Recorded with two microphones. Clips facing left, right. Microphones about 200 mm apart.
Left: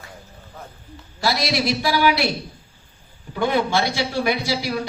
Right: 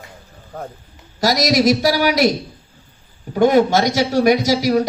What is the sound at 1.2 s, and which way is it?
A man's voice, 40° right (ahead or behind).